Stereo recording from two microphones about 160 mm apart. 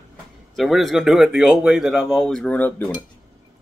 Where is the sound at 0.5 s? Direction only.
Centre (ahead or behind).